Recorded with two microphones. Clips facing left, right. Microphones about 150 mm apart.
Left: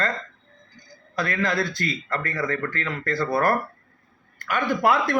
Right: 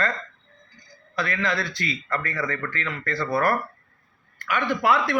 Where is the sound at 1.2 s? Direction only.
45° left (ahead or behind).